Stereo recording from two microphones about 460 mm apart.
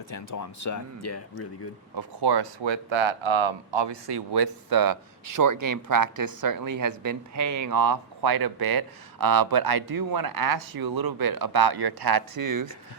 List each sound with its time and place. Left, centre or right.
0.1 s speech: left
2.0 s speech: right